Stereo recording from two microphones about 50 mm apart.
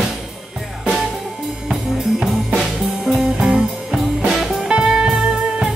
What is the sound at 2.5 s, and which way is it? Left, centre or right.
Music, centre.